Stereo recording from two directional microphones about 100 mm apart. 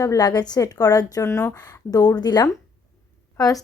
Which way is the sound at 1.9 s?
40° left (ahead or behind).